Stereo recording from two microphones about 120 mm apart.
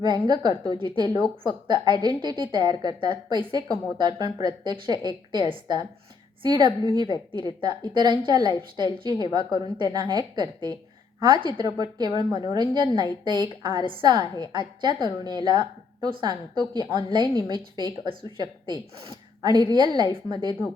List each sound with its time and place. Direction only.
0.0 s a woman's voice: 35° right (ahead or behind)